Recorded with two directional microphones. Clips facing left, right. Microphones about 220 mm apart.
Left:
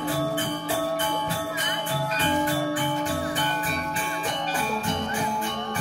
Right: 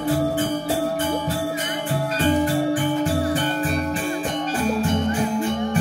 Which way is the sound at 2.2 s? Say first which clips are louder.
Right 6 dB; 45° right (ahead or behind).